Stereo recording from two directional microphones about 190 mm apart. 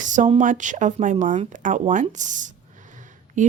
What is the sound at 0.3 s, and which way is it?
Speech, 40° right (ahead or behind).